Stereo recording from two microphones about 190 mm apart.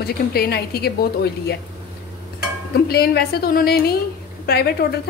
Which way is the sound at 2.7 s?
55° left (ahead or behind).